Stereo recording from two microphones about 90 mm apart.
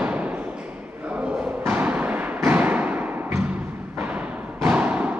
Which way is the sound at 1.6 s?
20° right (ahead or behind).